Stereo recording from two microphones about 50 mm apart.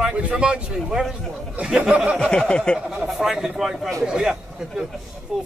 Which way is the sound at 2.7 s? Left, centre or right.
Centre.